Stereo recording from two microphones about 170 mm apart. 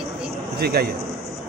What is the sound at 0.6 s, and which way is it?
Speech, 65° right (ahead or behind).